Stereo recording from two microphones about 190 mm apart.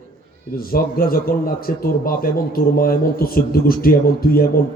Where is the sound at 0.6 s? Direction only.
50° left (ahead or behind).